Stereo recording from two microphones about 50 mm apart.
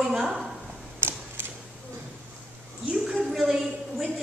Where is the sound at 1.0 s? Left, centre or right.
Right.